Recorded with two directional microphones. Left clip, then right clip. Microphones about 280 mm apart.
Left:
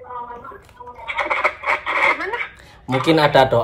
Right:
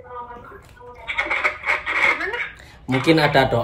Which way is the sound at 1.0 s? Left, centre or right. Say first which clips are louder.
Left 2 dB; centre.